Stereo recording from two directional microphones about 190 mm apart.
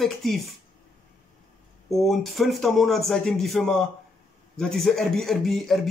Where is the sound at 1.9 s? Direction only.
Centre (ahead or behind).